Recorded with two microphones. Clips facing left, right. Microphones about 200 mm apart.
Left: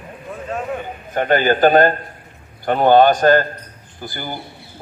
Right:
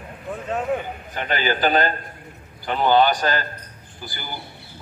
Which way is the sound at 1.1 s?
55° left (ahead or behind).